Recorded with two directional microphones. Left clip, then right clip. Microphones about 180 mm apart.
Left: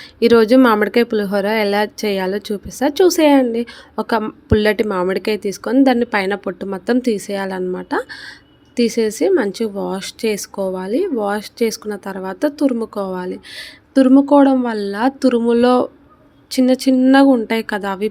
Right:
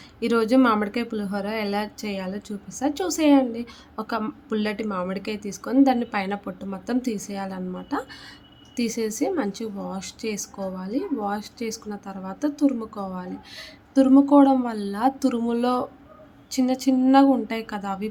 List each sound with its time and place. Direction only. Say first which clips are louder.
0.2 s speech: left 10 dB; 30° left (ahead or behind)